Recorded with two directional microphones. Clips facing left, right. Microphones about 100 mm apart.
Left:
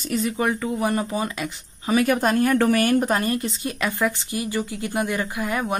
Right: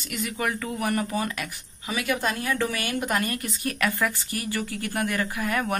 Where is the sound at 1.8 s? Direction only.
40° left (ahead or behind).